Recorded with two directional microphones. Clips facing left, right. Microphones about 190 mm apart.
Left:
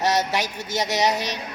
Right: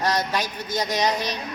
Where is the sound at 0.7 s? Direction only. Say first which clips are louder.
Left 1 dB; 80° left.